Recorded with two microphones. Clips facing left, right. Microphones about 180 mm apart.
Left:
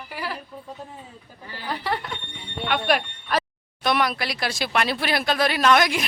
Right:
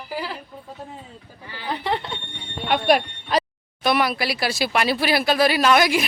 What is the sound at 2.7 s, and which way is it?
Speech, 40° right (ahead or behind).